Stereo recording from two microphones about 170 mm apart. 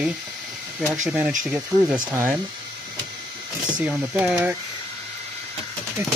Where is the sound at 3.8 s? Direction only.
10° right (ahead or behind).